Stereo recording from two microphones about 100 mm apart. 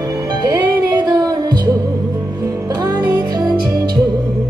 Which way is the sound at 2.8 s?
45° right (ahead or behind).